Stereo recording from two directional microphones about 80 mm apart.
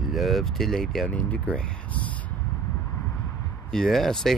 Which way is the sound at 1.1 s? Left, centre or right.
Centre.